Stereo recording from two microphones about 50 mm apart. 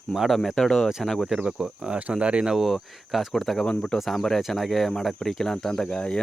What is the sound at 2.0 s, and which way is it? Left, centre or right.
Speech, right.